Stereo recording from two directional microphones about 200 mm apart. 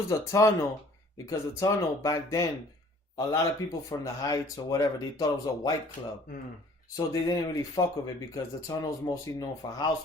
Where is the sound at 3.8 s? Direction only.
15° left (ahead or behind).